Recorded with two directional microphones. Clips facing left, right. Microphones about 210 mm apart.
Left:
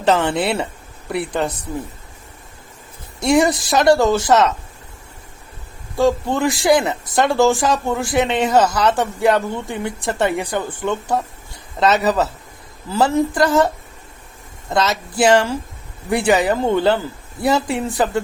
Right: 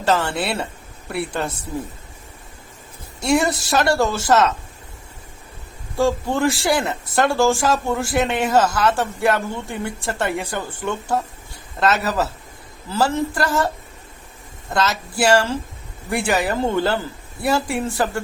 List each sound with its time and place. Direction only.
0.0 s speech: 20° left (ahead or behind)
3.2 s speech: 20° left (ahead or behind)
6.0 s speech: 15° left (ahead or behind)
14.7 s speech: 20° left (ahead or behind)